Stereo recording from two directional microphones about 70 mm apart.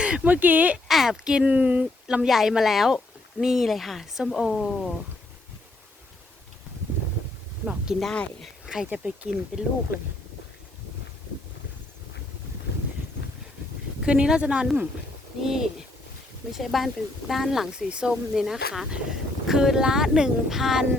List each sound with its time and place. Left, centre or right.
0.0 s speech: centre
0.9 s speech: centre
2.2 s speech: centre
7.6 s speech: centre
7.9 s speech: centre
8.6 s a sound: centre
8.9 s speech: right
14.0 s speech: centre